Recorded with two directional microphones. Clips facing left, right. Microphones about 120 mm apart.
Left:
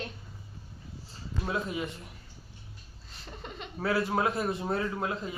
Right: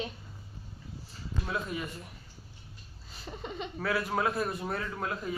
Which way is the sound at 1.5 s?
20° left (ahead or behind).